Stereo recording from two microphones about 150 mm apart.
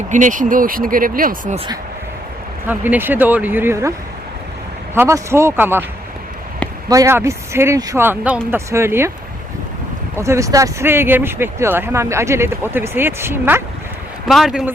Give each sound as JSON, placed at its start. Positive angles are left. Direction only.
{"t": 0.1, "sound": "speech", "side_deg": -60}
{"t": 2.6, "sound": "speech", "side_deg": -10}
{"t": 4.9, "sound": "speech", "side_deg": -20}
{"t": 6.8, "sound": "speech", "side_deg": -20}
{"t": 10.2, "sound": "speech", "side_deg": -20}
{"t": 14.3, "sound": "speech", "side_deg": 0}